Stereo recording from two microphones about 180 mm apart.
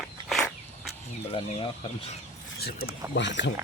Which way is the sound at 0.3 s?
Centre (ahead or behind).